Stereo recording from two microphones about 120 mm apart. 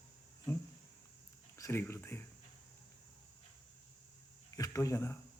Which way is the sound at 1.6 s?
20° left (ahead or behind).